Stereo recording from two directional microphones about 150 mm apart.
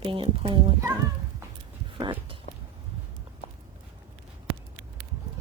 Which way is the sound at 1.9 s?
35° right (ahead or behind).